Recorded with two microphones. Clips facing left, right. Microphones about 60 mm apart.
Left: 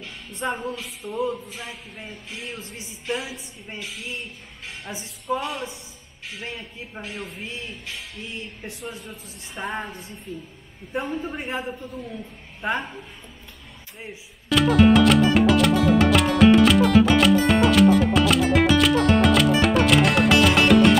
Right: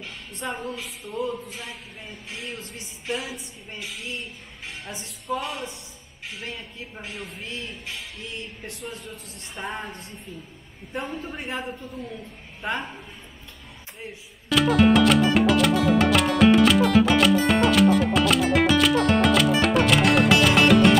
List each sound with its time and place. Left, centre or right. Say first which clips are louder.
0.4 s a man's voice: left 3 dB; centre
3.9 s a man's voice: right 1 dB; centre
5.4 s a man's voice: left 2 dB; centre
7.0 s a man's voice: left 3 dB; centre
7.4 s a man's voice: even; centre
14.5 s music: left 2 dB; centre